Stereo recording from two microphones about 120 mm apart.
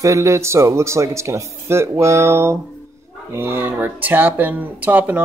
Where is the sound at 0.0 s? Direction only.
25° right (ahead or behind).